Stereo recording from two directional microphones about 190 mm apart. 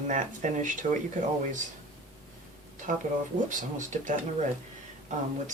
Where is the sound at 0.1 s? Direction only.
40° right (ahead or behind).